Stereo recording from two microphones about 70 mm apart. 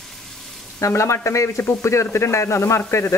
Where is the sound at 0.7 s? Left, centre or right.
Left.